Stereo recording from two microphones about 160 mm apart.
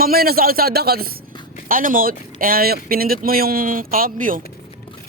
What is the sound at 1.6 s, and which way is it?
A man's voice, 60° right (ahead or behind).